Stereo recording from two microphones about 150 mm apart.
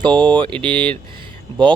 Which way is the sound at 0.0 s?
30° right (ahead or behind).